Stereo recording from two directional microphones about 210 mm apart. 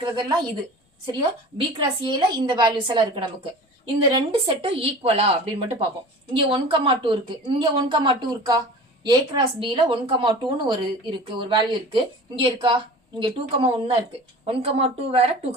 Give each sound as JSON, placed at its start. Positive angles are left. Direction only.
{"t": 0.0, "sound": "a woman's voice", "side_deg": -20}